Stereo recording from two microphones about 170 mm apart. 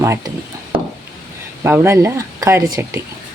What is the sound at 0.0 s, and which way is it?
Speech, 15° right (ahead or behind).